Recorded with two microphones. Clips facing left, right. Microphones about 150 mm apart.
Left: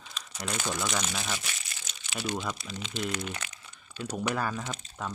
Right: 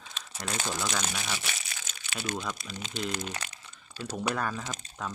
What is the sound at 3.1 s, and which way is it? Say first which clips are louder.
Crumpling: even; 30° right (ahead or behind).